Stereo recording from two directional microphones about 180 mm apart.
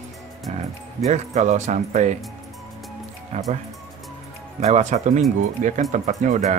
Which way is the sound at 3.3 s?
35° right (ahead or behind).